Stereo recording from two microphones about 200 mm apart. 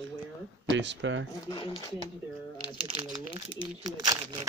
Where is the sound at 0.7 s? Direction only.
65° right (ahead or behind).